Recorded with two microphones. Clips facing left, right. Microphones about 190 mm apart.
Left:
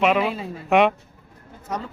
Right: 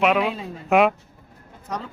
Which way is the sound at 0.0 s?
Centre (ahead or behind).